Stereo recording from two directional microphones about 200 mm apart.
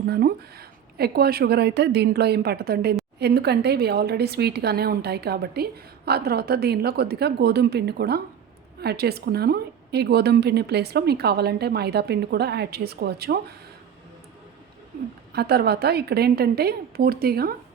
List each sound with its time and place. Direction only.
0.0 s a woman's voice: 50° right (ahead or behind)
15.3 s a woman's voice: 55° right (ahead or behind)